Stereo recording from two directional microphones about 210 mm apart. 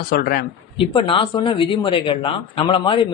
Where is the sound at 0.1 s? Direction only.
45° left (ahead or behind).